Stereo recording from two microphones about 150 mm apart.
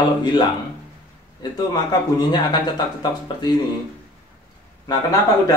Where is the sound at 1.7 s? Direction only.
25° left (ahead or behind).